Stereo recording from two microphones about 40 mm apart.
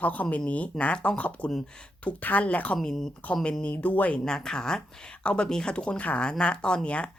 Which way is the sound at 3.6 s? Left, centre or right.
Left.